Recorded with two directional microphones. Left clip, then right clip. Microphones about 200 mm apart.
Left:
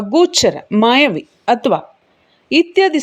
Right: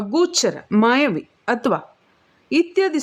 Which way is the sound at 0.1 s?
5° left (ahead or behind).